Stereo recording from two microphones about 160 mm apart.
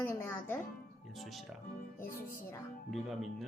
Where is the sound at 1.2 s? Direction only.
Centre (ahead or behind).